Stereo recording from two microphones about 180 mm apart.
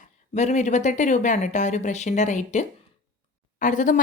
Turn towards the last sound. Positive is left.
turn(degrees=45)  # may be behind; listen again after turning